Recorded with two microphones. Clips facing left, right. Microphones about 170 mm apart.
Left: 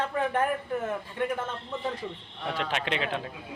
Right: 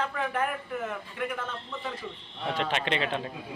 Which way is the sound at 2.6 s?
5° left (ahead or behind).